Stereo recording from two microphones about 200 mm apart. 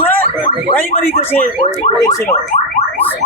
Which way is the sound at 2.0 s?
15° left (ahead or behind).